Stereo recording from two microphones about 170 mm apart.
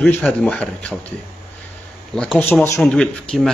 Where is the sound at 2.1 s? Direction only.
Centre (ahead or behind).